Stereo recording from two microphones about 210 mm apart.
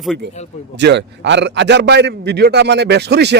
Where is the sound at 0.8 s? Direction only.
55° right (ahead or behind).